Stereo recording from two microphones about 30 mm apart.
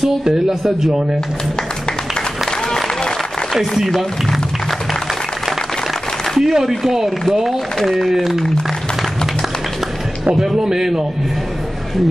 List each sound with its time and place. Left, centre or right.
0.2 s a man's voice: right
3.5 s a man's voice: centre
6.4 s a man's voice: centre
10.3 s a man's voice: centre